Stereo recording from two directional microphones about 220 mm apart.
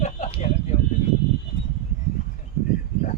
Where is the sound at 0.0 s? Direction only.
30° left (ahead or behind).